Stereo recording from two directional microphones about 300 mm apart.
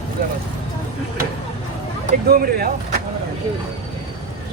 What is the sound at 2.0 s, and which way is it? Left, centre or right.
Speech, right.